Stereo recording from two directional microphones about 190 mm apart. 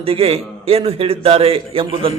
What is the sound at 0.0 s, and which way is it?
A man's voice, 30° right (ahead or behind).